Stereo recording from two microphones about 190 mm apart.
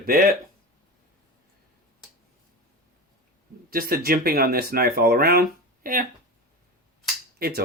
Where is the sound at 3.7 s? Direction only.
50° right (ahead or behind).